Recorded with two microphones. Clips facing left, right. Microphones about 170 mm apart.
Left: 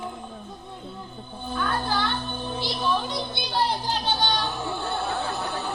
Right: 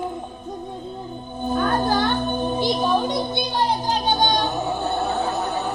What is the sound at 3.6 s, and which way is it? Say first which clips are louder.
Children playing: right 7 dB; 45° right (ahead or behind).